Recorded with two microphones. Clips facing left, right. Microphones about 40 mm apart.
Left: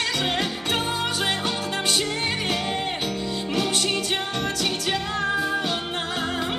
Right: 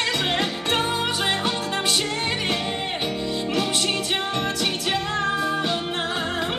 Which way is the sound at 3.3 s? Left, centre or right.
Centre.